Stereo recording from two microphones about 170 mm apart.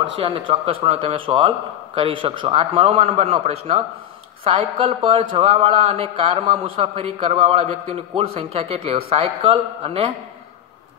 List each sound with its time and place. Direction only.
0.0 s speech: 30° right (ahead or behind)